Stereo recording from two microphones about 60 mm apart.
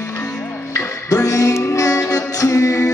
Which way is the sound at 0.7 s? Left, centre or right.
Left.